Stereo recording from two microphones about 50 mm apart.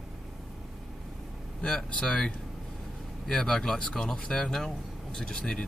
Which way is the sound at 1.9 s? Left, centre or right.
Left.